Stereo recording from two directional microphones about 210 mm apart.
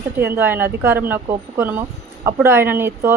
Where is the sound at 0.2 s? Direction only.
10° right (ahead or behind).